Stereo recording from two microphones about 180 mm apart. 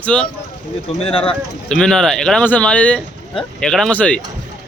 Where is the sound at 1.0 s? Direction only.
30° left (ahead or behind).